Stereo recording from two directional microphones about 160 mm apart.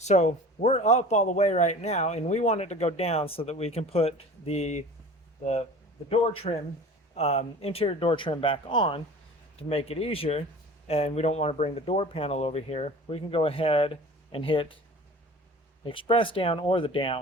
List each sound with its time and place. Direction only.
0.0 s a man's voice: 45° left (ahead or behind)
6.1 s speech: 40° left (ahead or behind)
15.8 s speech: 35° left (ahead or behind)